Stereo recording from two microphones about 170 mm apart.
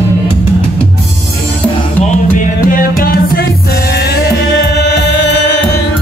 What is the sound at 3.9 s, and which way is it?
Music, 70° left (ahead or behind).